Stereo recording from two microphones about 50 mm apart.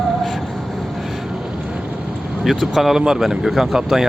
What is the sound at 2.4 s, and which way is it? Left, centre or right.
Speech, centre.